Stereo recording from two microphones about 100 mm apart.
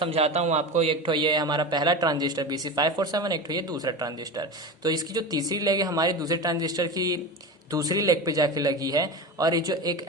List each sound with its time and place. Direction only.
0.0 s a man's voice: 85° right
1.0 s a man's voice: 50° right (ahead or behind)